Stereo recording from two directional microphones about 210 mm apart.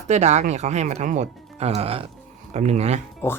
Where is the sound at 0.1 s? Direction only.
35° right (ahead or behind).